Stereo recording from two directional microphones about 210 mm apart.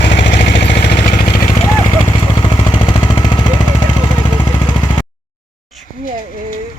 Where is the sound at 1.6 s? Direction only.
15° left (ahead or behind).